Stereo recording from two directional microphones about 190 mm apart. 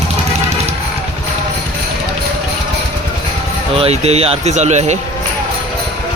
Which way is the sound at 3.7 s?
30° right (ahead or behind).